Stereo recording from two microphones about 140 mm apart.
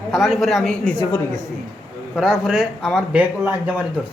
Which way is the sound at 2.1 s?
5° right (ahead or behind).